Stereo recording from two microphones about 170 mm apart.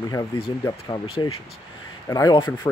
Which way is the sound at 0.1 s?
20° left (ahead or behind).